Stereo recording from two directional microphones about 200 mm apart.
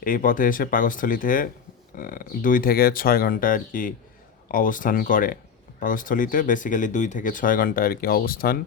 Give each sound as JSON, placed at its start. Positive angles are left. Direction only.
{"t": 0.0, "sound": "speech", "side_deg": 45}